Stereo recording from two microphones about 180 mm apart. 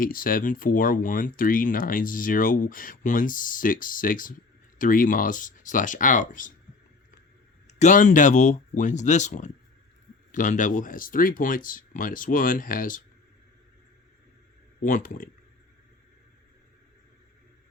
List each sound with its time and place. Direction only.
0.0 s speech: 50° left (ahead or behind)
7.8 s speech: 45° left (ahead or behind)
14.8 s speech: 50° left (ahead or behind)